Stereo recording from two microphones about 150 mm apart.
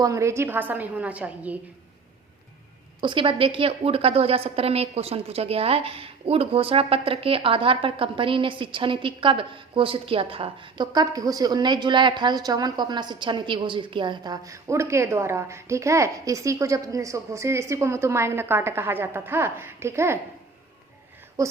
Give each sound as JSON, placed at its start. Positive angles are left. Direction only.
{"t": 0.0, "sound": "a woman's voice", "side_deg": -20}
{"t": 3.0, "sound": "a woman's voice", "side_deg": -35}
{"t": 21.4, "sound": "speech", "side_deg": -20}